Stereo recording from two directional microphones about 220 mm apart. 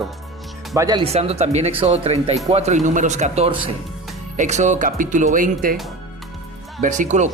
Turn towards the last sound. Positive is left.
turn(degrees=-35)  # may be behind; listen again after turning